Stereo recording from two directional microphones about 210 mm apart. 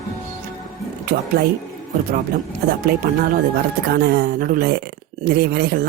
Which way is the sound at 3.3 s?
45° right (ahead or behind).